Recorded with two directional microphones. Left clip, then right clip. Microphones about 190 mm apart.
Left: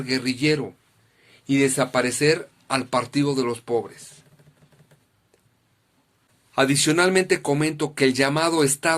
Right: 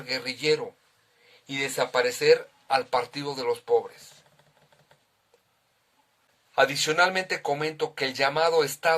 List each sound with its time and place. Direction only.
0.0 s speech: 35° left (ahead or behind)
6.5 s speech: 40° left (ahead or behind)